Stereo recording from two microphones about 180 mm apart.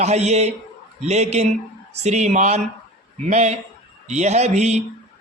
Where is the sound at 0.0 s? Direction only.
40° right (ahead or behind).